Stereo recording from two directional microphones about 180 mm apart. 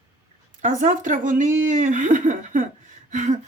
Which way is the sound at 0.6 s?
45° right (ahead or behind).